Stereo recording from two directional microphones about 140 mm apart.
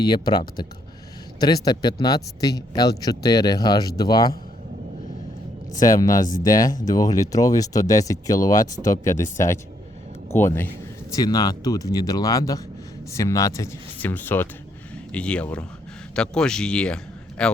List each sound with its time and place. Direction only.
0.0 s speech: 30° left (ahead or behind)
5.7 s speech: 25° left (ahead or behind)
6.2 s speech: 70° left (ahead or behind)
6.9 s speech: 25° left (ahead or behind)
11.1 s speech: 25° left (ahead or behind)
14.0 s speech: 15° left (ahead or behind)